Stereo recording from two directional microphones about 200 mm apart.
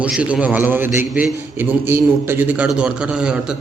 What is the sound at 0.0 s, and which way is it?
A man's voice, 5° right (ahead or behind).